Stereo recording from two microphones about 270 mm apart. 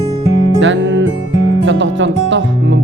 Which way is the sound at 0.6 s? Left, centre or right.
Right.